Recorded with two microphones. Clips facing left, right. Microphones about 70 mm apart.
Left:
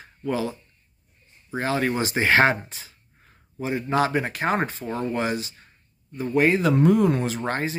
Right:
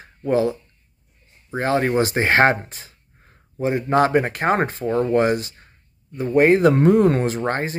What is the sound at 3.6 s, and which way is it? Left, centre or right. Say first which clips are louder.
Speech: right 5 dB; right.